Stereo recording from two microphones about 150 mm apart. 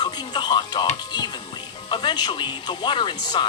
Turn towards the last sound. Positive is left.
turn(degrees=30)  # may be behind; listen again after turning